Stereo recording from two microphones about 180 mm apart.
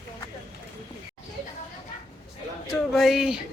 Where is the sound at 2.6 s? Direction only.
Centre (ahead or behind).